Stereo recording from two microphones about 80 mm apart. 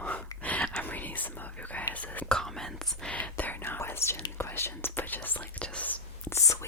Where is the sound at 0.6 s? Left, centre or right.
Centre.